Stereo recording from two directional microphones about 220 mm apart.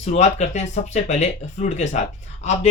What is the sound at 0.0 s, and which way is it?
Speech, 30° left (ahead or behind).